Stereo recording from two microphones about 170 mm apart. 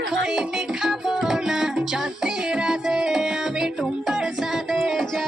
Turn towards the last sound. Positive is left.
turn(degrees=0)  # may be behind; listen again after turning